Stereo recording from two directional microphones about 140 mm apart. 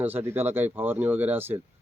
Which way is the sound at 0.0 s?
15° right (ahead or behind).